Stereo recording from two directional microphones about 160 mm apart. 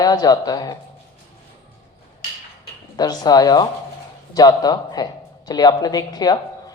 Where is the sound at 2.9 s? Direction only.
25° left (ahead or behind).